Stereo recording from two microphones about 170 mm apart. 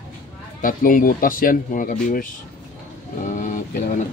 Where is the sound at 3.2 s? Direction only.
50° left (ahead or behind).